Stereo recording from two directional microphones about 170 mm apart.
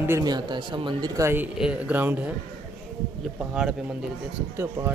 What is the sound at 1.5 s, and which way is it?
Speech, 5° right (ahead or behind).